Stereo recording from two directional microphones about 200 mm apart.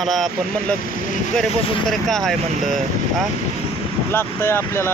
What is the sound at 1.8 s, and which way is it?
Speech, centre (ahead or behind).